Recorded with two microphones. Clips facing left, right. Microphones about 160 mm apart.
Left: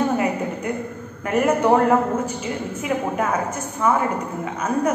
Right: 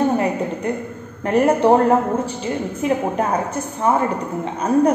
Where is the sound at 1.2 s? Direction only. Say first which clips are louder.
Right 3 dB; 30° right (ahead or behind).